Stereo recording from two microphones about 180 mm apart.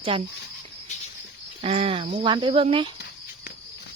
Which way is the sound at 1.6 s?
35° right (ahead or behind).